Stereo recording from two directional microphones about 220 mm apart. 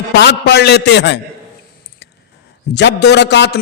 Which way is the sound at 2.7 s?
50° left (ahead or behind).